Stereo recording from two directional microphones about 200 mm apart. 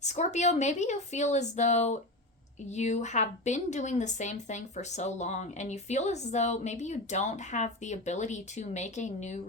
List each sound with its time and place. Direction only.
0.0 s speech: 35° left (ahead or behind)